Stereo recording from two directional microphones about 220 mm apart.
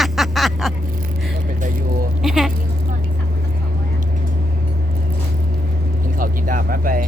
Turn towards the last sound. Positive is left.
turn(degrees=-40)  # may be behind; listen again after turning